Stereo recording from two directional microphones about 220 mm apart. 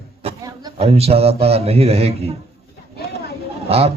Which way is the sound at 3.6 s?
25° right (ahead or behind).